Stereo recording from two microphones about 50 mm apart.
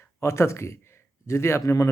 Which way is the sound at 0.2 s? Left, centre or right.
Left.